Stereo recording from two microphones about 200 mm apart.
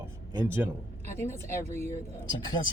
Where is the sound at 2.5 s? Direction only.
20° left (ahead or behind).